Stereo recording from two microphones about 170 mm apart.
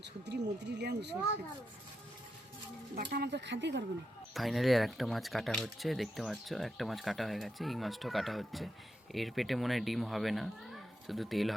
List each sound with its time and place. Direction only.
0.0 s speech: 85° right
3.1 s speech: 75° right (ahead or behind); by 3.8 s 90° right
4.4 s speech: centre (ahead or behind)